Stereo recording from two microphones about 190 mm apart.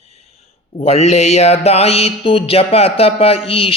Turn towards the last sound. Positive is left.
turn(degrees=30)  # may be behind; listen again after turning